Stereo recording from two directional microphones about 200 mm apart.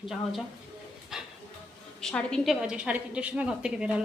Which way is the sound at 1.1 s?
5° right (ahead or behind).